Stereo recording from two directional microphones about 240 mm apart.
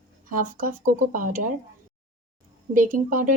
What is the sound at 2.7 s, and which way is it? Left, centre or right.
Speech, right.